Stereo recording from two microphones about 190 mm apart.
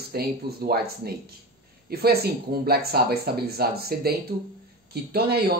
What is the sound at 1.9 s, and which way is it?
Speech, 55° right (ahead or behind).